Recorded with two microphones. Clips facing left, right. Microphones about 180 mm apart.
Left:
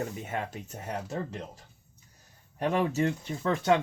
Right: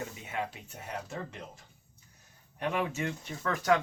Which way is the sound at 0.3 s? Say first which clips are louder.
Left 2 dB; 45° left (ahead or behind).